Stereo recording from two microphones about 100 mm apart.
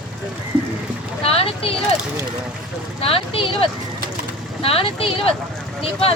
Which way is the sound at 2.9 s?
70° left (ahead or behind).